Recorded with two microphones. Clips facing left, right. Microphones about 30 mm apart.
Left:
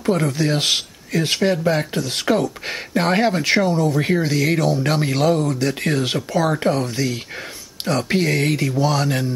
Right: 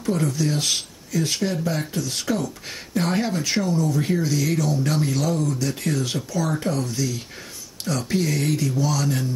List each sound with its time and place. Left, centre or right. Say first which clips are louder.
0.0 s speech: left 4 dB; left